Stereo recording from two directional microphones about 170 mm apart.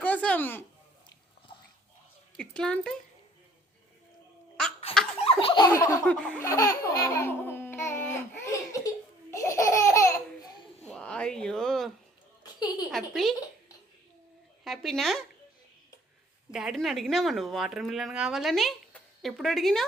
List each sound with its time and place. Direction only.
0.0 s a sound: 10° left (ahead or behind)
2.4 s speech: 5° left (ahead or behind)
5.2 s laughter: 35° left (ahead or behind)
6.1 s laughter: 5° left (ahead or behind)
6.5 s laughter: 20° left (ahead or behind)
10.8 s a sound: 5° left (ahead or behind)
12.4 s a sound: 25° left (ahead or behind)
12.9 s speech: centre (ahead or behind)
14.6 s speech: centre (ahead or behind)
16.5 s speech: 5° right (ahead or behind)